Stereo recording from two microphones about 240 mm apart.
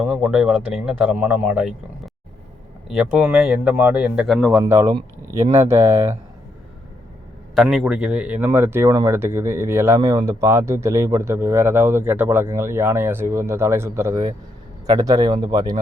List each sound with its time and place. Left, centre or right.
0.0 s speech: centre
3.2 s speech: centre
4.6 s speech: centre
7.5 s speech: centre